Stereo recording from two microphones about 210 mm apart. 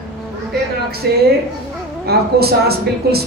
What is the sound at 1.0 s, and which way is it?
A woman's voice, 50° right (ahead or behind).